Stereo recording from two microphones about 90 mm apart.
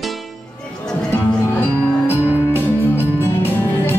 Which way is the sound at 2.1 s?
20° right (ahead or behind).